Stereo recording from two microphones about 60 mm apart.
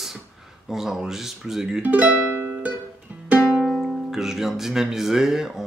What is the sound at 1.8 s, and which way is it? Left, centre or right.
Speech, right.